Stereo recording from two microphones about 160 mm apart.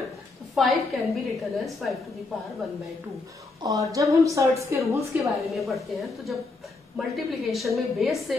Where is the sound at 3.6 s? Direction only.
20° right (ahead or behind).